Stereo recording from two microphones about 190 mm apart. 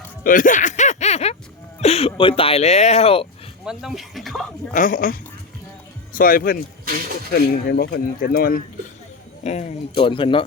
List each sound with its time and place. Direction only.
0.3 s a sound: 45° left (ahead or behind)
1.8 s speech: 30° left (ahead or behind)
3.6 s speech: centre (ahead or behind)
4.7 s speech: 40° left (ahead or behind)
6.1 s speech: 45° left (ahead or behind)
9.4 s speech: 35° left (ahead or behind)